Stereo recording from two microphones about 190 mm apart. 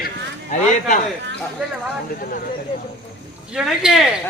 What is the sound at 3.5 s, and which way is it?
Speech, 5° right (ahead or behind).